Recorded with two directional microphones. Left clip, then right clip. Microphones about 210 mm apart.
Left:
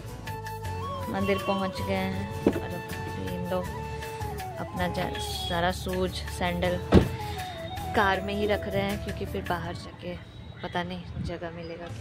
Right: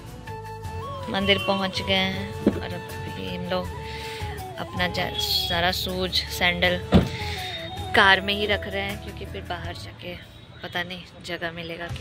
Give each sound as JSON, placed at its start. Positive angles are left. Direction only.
{"t": 1.1, "sound": "speech", "side_deg": 0}
{"t": 9.3, "sound": "speech", "side_deg": 20}
{"t": 11.2, "sound": "speech", "side_deg": 5}